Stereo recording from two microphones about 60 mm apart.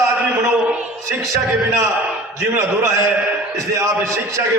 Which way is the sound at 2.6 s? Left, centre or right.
Right.